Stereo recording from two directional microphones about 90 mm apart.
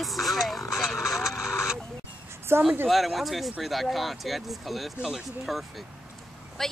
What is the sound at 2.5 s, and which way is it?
Speech, 25° right (ahead or behind).